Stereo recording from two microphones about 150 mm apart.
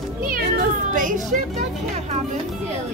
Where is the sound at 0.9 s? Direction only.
60° right (ahead or behind).